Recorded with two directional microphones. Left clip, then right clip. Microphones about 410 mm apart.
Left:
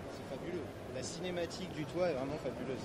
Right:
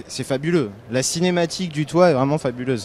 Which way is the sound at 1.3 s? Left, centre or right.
Right.